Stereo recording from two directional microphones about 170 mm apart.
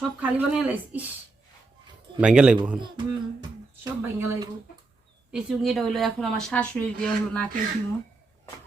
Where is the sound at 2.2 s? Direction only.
5° right (ahead or behind).